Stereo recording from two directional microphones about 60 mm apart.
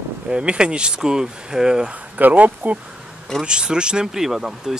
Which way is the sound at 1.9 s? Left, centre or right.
Right.